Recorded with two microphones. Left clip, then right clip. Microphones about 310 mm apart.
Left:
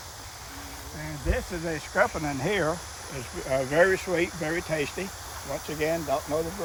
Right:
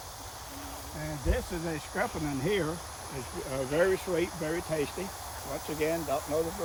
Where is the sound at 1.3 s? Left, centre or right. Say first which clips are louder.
Left 4 dB; centre.